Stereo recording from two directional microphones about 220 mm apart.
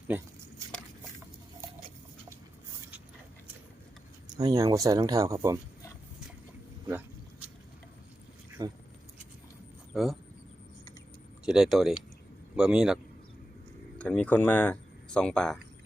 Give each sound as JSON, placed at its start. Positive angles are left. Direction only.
{"t": 4.3, "sound": "speech", "side_deg": -15}
{"t": 8.6, "sound": "speech", "side_deg": -15}
{"t": 9.9, "sound": "speech", "side_deg": 0}
{"t": 11.4, "sound": "speech", "side_deg": 0}
{"t": 14.0, "sound": "speech", "side_deg": 5}